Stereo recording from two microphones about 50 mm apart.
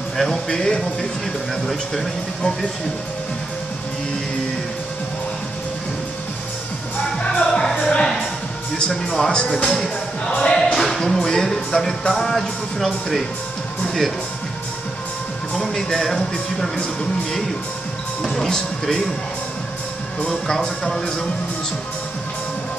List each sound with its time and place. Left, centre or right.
0.2 s speech: centre
1.5 s music: centre
7.2 s music: centre
8.7 s speech: centre
9.7 s speech: centre
12.1 s music: centre
15.5 s speech: centre
18.3 s speech: centre
20.2 s speech: centre